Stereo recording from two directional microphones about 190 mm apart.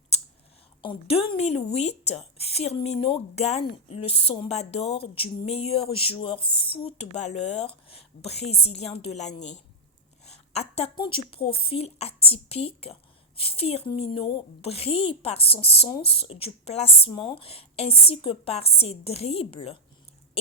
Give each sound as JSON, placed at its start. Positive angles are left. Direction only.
{"t": 0.8, "sound": "a woman's voice", "side_deg": 30}